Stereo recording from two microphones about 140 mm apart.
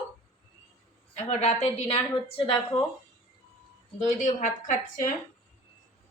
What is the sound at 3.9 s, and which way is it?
Speech, 60° left (ahead or behind).